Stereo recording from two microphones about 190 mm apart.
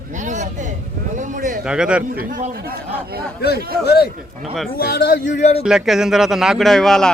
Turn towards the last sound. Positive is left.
turn(degrees=0)  # may be behind; listen again after turning